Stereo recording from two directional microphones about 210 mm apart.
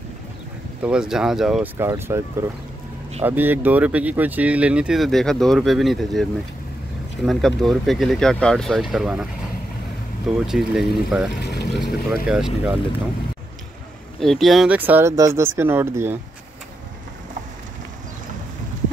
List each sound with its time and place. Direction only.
0.8 s speech: 5° right (ahead or behind)
7.2 s speech: centre (ahead or behind)
10.3 s speech: 5° right (ahead or behind)
11.3 s speech: 50° left (ahead or behind)
11.8 s speech: centre (ahead or behind)
14.2 s speech: centre (ahead or behind)